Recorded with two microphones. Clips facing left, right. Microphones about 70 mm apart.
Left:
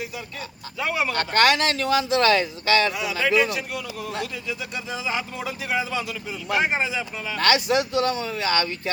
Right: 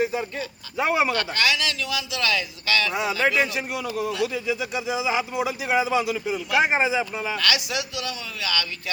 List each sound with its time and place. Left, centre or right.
0.0 s a sound: right
0.8 s a man's voice: right
1.1 s speech: left
2.9 s a man's voice: right
7.3 s speech: left